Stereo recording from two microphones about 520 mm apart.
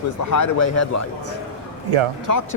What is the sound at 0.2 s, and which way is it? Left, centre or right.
A man's voice, left.